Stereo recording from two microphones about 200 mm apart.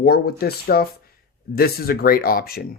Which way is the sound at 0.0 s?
50° left (ahead or behind).